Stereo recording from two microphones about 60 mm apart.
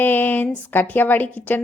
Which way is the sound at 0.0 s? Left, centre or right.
Left.